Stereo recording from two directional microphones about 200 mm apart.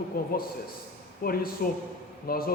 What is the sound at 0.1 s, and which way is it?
A man's voice, 50° left (ahead or behind).